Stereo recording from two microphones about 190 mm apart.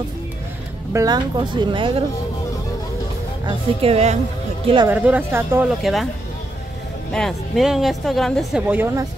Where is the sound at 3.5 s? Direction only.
30° right (ahead or behind).